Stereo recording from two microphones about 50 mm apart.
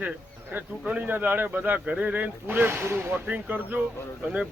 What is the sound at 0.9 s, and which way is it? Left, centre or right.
Speech, right.